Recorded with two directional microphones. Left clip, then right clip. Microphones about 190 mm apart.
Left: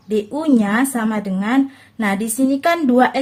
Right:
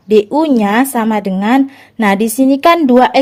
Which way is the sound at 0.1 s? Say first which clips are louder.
Right 8 dB; 40° right (ahead or behind).